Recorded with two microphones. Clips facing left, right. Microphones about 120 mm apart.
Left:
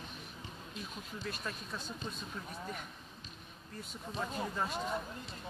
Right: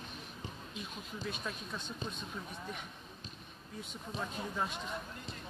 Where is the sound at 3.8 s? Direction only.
Centre (ahead or behind).